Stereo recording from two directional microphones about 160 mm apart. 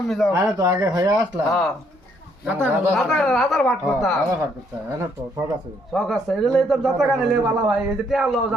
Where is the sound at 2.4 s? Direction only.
15° right (ahead or behind).